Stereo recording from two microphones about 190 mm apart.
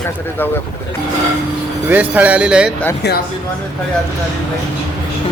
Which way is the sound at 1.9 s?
10° right (ahead or behind).